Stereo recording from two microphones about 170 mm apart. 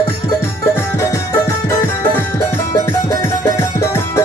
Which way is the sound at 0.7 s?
15° left (ahead or behind).